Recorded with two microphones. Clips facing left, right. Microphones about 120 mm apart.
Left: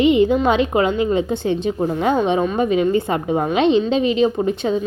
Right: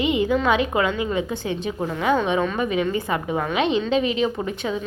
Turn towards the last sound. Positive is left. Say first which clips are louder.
# left 7 dB
turn(degrees=30)  # may be behind; listen again after turning